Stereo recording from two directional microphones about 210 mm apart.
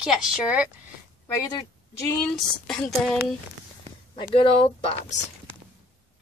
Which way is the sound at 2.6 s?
5° left (ahead or behind).